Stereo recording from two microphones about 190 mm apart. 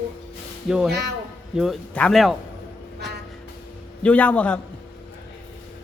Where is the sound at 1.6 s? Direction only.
5° left (ahead or behind).